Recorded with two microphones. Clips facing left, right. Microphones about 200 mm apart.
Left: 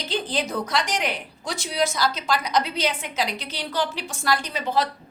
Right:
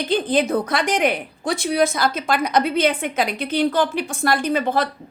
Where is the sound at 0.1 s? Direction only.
55° right (ahead or behind).